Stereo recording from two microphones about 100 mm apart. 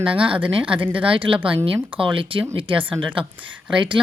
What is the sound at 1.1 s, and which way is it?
Speech, 60° right (ahead or behind).